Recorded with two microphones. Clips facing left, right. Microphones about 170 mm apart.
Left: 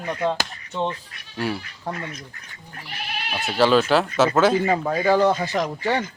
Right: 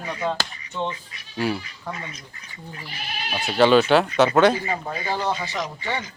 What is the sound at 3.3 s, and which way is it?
Speech, centre (ahead or behind).